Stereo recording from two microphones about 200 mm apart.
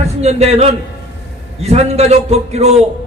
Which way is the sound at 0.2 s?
35° right (ahead or behind).